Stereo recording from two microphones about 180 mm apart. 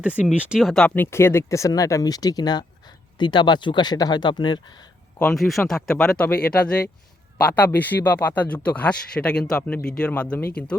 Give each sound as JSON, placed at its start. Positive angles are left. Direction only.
{"t": 0.0, "sound": "speech", "side_deg": -5}
{"t": 5.2, "sound": "speech", "side_deg": 0}